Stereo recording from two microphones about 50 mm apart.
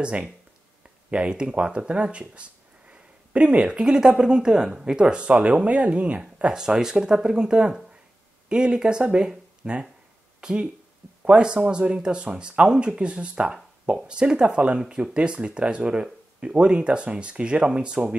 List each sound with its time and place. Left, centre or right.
0.0 s speech: right